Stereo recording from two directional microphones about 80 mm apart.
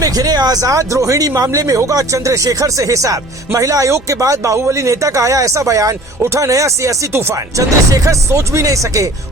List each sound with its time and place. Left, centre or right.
0.0 s speech: right